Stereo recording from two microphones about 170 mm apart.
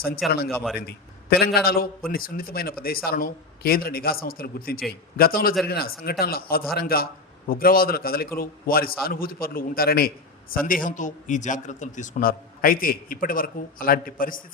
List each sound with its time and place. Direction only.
0.2 s speech: centre (ahead or behind)
1.3 s a man's voice: 70° left (ahead or behind)